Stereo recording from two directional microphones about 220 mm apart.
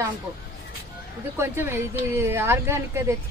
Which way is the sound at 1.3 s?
10° right (ahead or behind).